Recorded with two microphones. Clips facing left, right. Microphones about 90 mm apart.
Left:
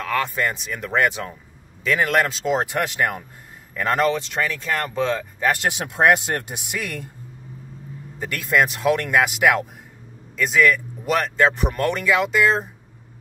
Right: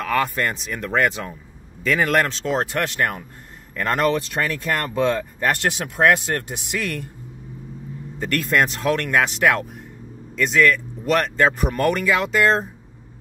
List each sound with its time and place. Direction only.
0.0 s speech: 5° right (ahead or behind)
2.4 s speech: 15° left (ahead or behind)
5.6 s speech: 20° left (ahead or behind)
8.2 s speech: 5° left (ahead or behind)